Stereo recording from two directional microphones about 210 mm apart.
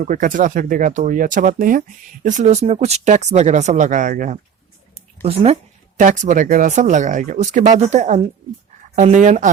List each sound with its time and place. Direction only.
0.0 s speech: 40° right (ahead or behind)
5.2 s speech: 30° right (ahead or behind)